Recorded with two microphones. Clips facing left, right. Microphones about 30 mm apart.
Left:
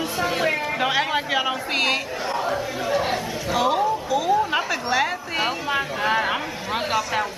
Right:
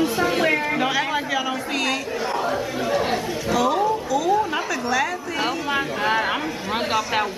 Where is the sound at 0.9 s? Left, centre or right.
Left.